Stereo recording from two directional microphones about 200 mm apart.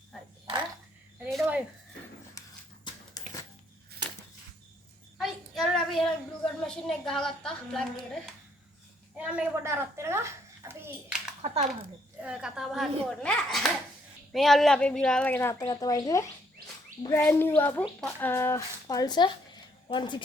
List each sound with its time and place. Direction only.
1.2 s a sound: 5° right (ahead or behind)
3.2 s a sound: 20° left (ahead or behind)
5.1 s child singing: centre (ahead or behind)
6.4 s a woman's voice: 5° left (ahead or behind)
9.1 s a child's voice: 5° right (ahead or behind)
11.4 s speech: 30° right (ahead or behind)
12.2 s a child's voice: 5° right (ahead or behind); by 20.2 s 25° left (ahead or behind)